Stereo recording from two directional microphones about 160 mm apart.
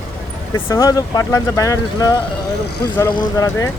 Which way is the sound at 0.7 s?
20° left (ahead or behind).